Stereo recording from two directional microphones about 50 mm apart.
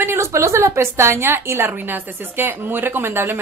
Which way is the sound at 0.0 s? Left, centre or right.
Right.